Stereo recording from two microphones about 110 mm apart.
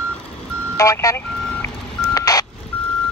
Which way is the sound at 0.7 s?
30° left (ahead or behind).